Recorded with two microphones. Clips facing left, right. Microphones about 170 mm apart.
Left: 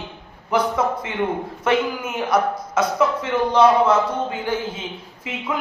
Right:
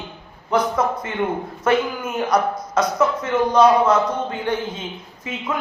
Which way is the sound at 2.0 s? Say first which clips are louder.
Right 1 dB; 5° left (ahead or behind).